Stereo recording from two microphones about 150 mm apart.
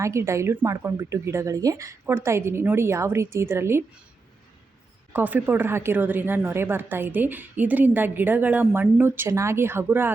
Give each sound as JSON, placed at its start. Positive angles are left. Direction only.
{"t": 0.0, "sound": "a woman's voice", "side_deg": -20}
{"t": 5.1, "sound": "a woman's voice", "side_deg": -10}